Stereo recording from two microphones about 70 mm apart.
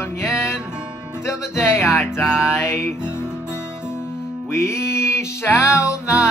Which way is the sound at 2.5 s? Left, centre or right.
Left.